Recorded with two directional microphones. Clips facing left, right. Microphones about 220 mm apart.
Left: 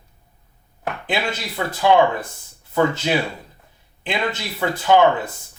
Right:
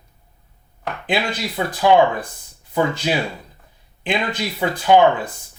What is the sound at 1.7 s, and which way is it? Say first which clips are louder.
Speech: right 1 dB; 15° right (ahead or behind).